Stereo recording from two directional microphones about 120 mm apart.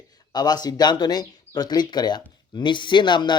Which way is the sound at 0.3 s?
35° left (ahead or behind).